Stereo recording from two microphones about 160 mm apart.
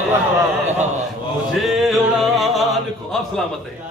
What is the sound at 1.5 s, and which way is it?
Music, centre (ahead or behind).